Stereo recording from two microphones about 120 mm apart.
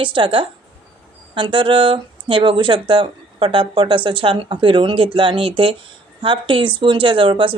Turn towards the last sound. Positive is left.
turn(degrees=-45)  # may be behind; listen again after turning